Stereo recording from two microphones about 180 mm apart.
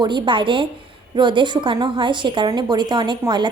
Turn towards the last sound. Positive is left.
turn(degrees=-25)  # may be behind; listen again after turning